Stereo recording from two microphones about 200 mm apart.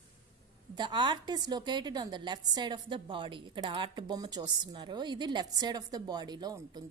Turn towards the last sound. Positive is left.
turn(degrees=-20)  # may be behind; listen again after turning